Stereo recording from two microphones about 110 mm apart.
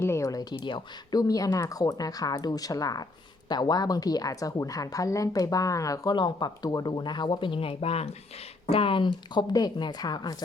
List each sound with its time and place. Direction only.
0.0 s speech: 25° left (ahead or behind)
0.5 s speech: 45° left (ahead or behind)